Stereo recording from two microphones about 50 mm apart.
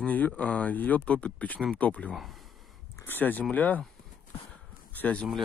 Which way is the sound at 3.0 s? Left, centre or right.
Left.